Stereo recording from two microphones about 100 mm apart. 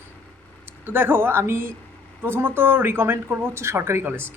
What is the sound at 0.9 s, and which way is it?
Speech, 20° right (ahead or behind).